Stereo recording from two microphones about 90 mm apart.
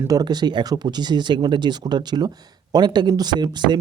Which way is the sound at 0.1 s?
50° right (ahead or behind).